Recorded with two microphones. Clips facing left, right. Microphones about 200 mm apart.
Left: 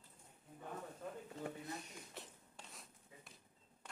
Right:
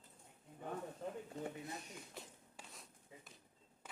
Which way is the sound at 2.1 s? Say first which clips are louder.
Right 1 dB; centre (ahead or behind).